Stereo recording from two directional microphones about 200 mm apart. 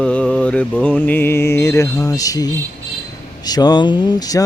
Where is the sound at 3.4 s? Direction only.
20° left (ahead or behind).